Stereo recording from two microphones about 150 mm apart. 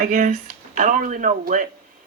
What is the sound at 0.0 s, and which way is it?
A woman's voice, 70° right (ahead or behind).